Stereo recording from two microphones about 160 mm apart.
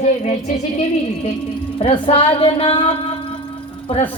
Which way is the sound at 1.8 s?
35° left (ahead or behind).